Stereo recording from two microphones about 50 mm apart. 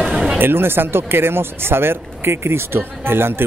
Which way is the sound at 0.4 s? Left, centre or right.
Right.